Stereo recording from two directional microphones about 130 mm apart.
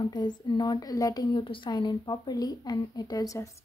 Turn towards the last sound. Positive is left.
turn(degrees=25)  # may be behind; listen again after turning